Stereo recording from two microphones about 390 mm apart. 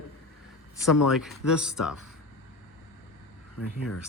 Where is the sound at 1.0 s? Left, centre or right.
Centre.